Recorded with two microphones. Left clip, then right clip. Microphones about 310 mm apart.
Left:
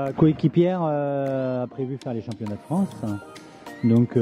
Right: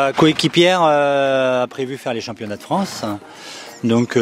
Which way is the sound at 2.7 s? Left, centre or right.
Right.